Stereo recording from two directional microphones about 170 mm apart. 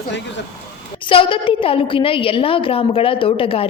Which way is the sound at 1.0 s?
30° left (ahead or behind).